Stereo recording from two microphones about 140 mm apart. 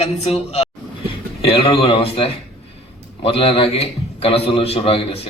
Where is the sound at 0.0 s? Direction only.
50° left (ahead or behind).